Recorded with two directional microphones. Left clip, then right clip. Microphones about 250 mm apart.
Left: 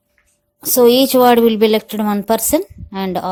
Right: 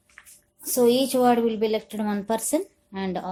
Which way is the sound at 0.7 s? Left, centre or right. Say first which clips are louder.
Left 10 dB; left.